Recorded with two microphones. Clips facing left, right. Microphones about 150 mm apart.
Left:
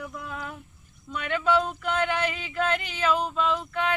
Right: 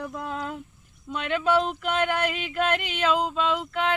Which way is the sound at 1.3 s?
20° right (ahead or behind).